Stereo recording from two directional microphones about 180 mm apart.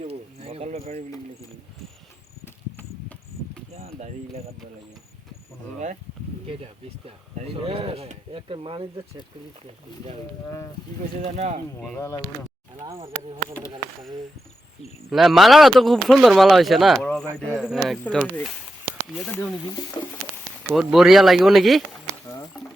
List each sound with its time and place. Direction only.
0.0 s a sound: 35° right (ahead or behind)
3.8 s speech: 35° right (ahead or behind)
7.3 s speech: 35° right (ahead or behind)
10.4 s speech: 15° left (ahead or behind)
11.2 s speech: 40° right (ahead or behind)
11.9 s speech: 15° left (ahead or behind)
12.8 s speech: 25° right (ahead or behind)
15.1 s speech: centre (ahead or behind)
20.7 s speech: 5° right (ahead or behind)